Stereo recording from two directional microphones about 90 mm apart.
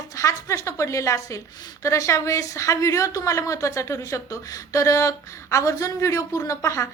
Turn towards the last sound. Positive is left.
turn(degrees=35)  # may be behind; listen again after turning